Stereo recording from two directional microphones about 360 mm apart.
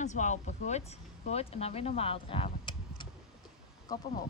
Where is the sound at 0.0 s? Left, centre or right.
Centre.